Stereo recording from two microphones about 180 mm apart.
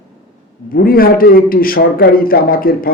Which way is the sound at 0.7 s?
55° left (ahead or behind).